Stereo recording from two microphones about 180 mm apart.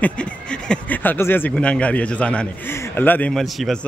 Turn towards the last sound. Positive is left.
turn(degrees=0)  # may be behind; listen again after turning